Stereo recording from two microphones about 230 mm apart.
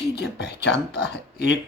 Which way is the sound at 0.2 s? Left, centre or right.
Left.